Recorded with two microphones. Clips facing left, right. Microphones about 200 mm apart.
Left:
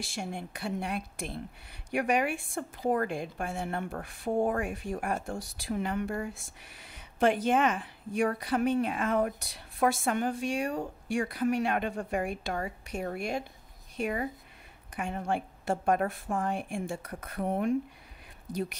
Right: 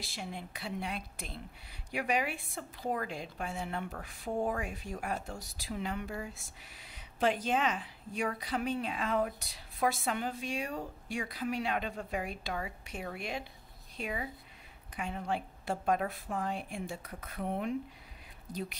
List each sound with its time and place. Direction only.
0.1 s a woman's voice: 50° left (ahead or behind)